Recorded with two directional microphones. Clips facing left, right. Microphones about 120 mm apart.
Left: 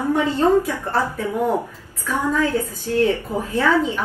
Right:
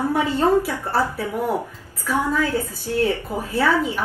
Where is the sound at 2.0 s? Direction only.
15° right (ahead or behind).